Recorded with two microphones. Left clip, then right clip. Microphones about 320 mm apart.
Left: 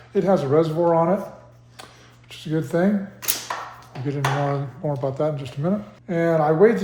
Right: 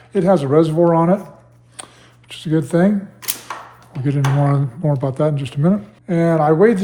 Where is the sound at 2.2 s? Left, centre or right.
Right.